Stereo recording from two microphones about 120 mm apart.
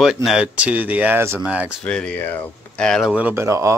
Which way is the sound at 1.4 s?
10° right (ahead or behind).